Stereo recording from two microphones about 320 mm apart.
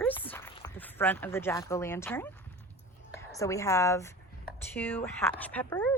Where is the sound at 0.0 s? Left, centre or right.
Centre.